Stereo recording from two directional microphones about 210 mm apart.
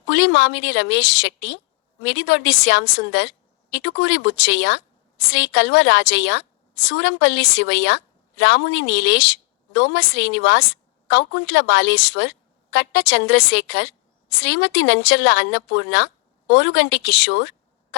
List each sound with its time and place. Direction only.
0.1 s a woman's voice: 60° left (ahead or behind)